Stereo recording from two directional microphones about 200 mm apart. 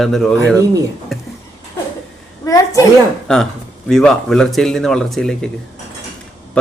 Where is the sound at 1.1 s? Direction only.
Centre (ahead or behind).